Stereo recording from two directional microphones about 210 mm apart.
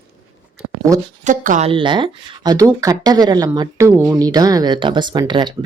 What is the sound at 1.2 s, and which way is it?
Speech, 35° right (ahead or behind).